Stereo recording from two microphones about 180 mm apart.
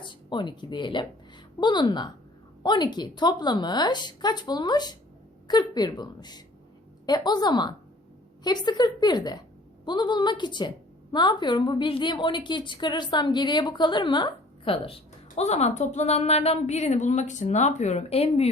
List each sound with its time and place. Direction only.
0.0 s a woman's voice: 25° left (ahead or behind)